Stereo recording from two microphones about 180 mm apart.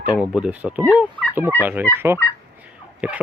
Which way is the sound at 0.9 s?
10° right (ahead or behind).